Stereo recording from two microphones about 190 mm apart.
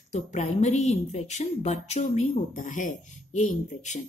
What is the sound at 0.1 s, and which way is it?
A woman's voice, 35° left (ahead or behind).